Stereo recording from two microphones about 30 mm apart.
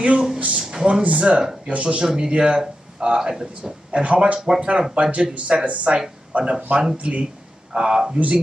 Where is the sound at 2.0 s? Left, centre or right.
Right.